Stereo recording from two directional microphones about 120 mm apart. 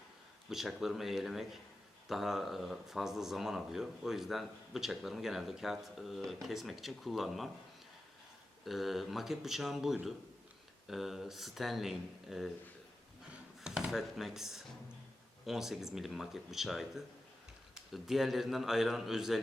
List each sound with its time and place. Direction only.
0.5 s speech: centre (ahead or behind)
8.6 s speech: centre (ahead or behind)
13.6 s speech: 5° right (ahead or behind)